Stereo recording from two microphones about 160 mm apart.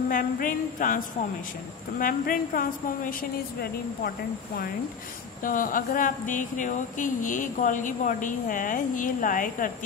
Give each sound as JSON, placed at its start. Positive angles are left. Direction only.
{"t": 0.1, "sound": "speech", "side_deg": 60}
{"t": 5.4, "sound": "speech", "side_deg": 60}